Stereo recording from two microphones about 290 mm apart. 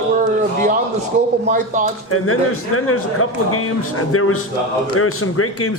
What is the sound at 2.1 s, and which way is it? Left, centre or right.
A man's voice, left.